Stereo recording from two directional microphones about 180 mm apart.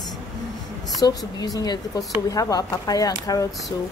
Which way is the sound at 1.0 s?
20° left (ahead or behind).